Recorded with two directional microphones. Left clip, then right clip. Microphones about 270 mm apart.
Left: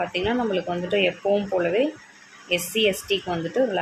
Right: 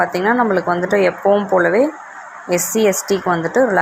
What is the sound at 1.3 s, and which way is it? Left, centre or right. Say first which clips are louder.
Speech: right 9 dB; centre.